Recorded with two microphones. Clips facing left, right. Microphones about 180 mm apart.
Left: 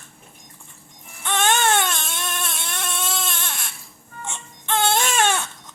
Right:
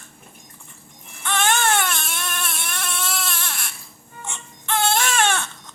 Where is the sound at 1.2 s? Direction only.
20° left (ahead or behind).